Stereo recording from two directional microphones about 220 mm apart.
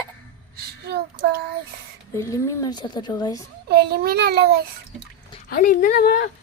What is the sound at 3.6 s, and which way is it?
Speech, 45° right (ahead or behind).